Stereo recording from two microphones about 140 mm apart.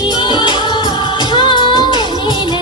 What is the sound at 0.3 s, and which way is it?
Music, 35° left (ahead or behind).